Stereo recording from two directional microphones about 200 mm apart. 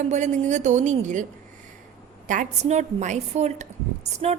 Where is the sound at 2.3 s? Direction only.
35° right (ahead or behind).